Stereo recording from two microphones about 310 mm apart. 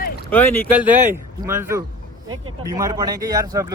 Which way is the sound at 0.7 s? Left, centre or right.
Centre.